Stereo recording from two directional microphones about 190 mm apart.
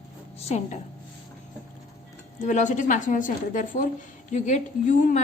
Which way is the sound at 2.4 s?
40° left (ahead or behind).